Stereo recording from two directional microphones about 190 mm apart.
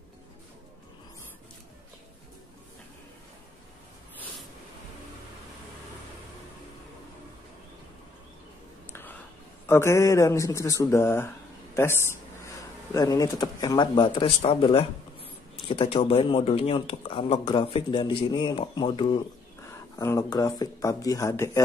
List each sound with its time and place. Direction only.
9.7 s speech: 15° left (ahead or behind)
20.0 s speech: 15° left (ahead or behind)